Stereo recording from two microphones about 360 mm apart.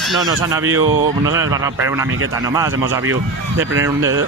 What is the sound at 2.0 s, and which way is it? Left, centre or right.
Speech, right.